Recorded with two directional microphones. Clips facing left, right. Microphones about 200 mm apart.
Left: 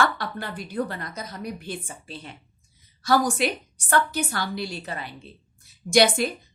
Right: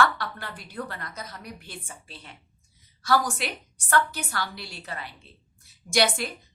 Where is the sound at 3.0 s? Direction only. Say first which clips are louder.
Left 4 dB; 15° left (ahead or behind).